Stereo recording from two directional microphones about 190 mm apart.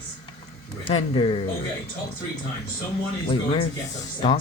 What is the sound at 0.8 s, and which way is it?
Speech, 25° left (ahead or behind).